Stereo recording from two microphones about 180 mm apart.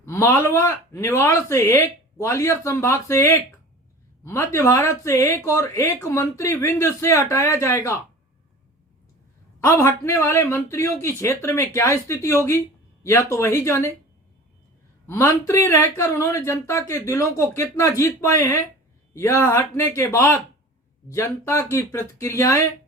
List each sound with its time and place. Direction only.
0.0 s speech: 15° left (ahead or behind)
9.6 s speech: 15° left (ahead or behind)
15.0 s speech: 15° left (ahead or behind)